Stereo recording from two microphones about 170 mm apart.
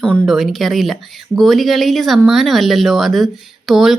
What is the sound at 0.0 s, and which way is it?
Speech, 5° left (ahead or behind).